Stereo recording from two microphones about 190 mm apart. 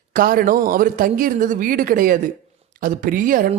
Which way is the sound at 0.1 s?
50° right (ahead or behind).